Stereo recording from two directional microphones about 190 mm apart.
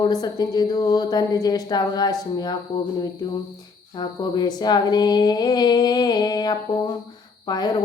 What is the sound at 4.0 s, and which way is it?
A woman's voice, 20° left (ahead or behind).